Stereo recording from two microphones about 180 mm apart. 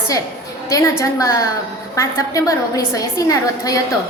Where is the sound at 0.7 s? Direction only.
15° left (ahead or behind).